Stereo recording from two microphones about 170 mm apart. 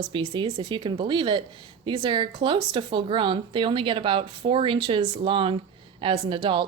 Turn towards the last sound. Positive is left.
turn(degrees=-30)  # may be behind; listen again after turning